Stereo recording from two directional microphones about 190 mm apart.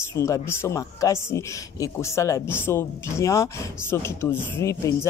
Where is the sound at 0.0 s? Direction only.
15° left (ahead or behind).